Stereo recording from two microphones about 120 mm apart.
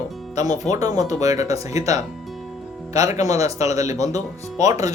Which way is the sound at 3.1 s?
75° left (ahead or behind).